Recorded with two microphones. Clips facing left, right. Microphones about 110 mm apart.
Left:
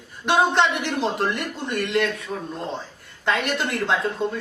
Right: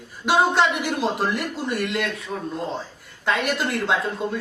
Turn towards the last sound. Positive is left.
turn(degrees=0)  # may be behind; listen again after turning